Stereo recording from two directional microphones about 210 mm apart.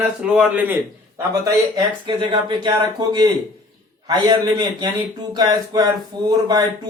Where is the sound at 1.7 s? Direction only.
20° right (ahead or behind).